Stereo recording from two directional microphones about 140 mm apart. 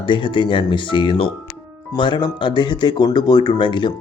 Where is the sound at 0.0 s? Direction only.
35° left (ahead or behind).